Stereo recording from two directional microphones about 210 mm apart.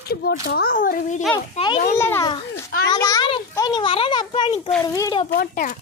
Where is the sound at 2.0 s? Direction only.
10° left (ahead or behind).